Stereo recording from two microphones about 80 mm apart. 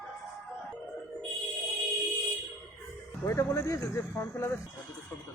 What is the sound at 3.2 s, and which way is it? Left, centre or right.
Speech, left.